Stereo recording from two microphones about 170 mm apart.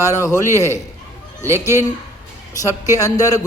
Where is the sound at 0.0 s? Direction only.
20° left (ahead or behind).